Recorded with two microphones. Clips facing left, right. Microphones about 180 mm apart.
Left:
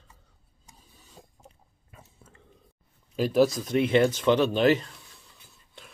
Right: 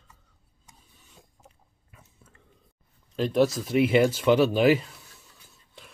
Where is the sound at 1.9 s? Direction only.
30° left (ahead or behind).